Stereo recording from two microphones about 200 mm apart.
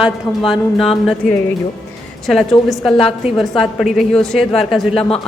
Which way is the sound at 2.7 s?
Centre (ahead or behind).